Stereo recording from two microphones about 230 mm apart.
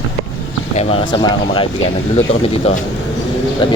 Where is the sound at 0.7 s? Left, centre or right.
Left.